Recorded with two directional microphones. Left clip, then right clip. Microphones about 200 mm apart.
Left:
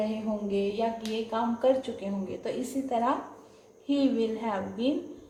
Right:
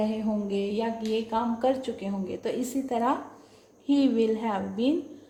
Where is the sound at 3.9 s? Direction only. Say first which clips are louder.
Right 3 dB; 50° right (ahead or behind).